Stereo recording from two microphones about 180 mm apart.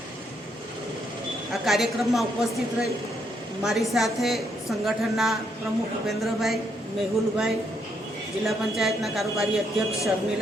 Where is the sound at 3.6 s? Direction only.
Centre (ahead or behind).